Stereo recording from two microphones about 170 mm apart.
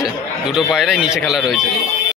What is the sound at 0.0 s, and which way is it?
A man's voice, 5° right (ahead or behind).